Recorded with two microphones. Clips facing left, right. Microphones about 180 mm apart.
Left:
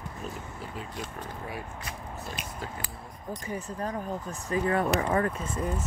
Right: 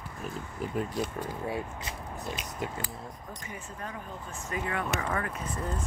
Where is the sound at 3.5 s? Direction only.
35° left (ahead or behind).